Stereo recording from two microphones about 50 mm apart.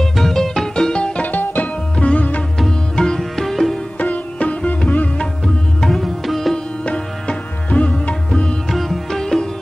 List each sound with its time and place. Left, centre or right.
0.0 s music: centre
1.2 s music: left
2.0 s sitar: left
3.2 s music: centre
4.0 s sitar: left
5.8 s music: centre
6.5 s music: centre
8.6 s music: centre